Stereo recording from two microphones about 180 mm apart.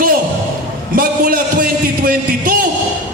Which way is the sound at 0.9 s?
55° right (ahead or behind).